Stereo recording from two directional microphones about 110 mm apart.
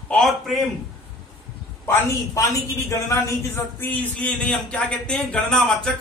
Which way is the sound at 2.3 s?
30° left (ahead or behind).